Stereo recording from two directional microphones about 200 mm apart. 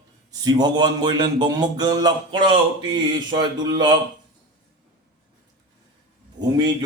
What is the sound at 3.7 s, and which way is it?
Speech, 20° right (ahead or behind).